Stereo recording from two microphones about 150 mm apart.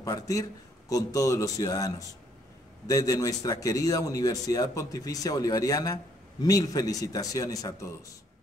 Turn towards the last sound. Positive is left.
turn(degrees=25)  # may be behind; listen again after turning